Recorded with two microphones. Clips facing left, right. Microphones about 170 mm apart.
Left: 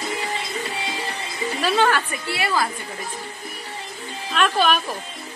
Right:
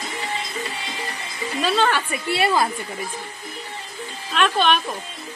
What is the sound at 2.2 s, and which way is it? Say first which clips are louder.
Speech: right 6 dB; 25° right (ahead or behind).